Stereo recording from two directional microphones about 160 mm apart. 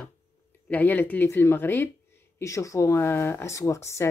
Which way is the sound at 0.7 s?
10° left (ahead or behind).